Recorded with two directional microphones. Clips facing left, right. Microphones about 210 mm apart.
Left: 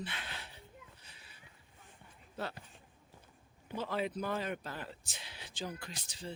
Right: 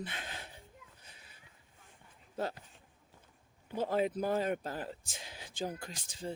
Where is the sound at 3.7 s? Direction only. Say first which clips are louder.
Right 4 dB; 45° right (ahead or behind).